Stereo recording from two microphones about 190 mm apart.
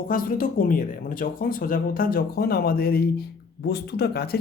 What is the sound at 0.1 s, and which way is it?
A man's voice, 50° left (ahead or behind).